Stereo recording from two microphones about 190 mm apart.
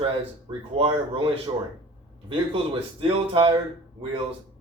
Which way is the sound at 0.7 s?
30° right (ahead or behind).